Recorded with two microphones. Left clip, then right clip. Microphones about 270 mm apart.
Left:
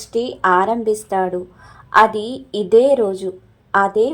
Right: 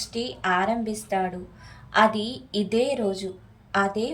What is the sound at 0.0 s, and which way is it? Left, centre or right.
Speech, centre.